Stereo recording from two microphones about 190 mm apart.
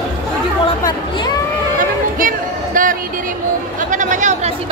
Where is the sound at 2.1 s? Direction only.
45° right (ahead or behind).